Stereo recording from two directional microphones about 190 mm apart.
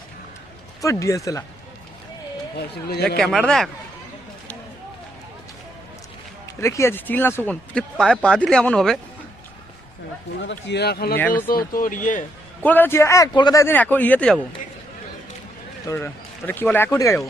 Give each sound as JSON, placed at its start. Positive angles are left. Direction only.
{"t": 0.8, "sound": "speech", "side_deg": 15}
{"t": 2.6, "sound": "speech", "side_deg": 55}
{"t": 3.2, "sound": "speech", "side_deg": 0}
{"t": 6.6, "sound": "speech", "side_deg": 15}
{"t": 10.7, "sound": "speech", "side_deg": 60}
{"t": 11.2, "sound": "speech", "side_deg": 10}
{"t": 11.4, "sound": "speech", "side_deg": 50}
{"t": 12.6, "sound": "speech", "side_deg": 10}
{"t": 15.9, "sound": "speech", "side_deg": 15}